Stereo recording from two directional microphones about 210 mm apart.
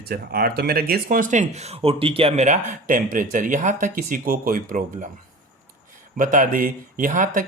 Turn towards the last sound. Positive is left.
turn(degrees=-40)  # may be behind; listen again after turning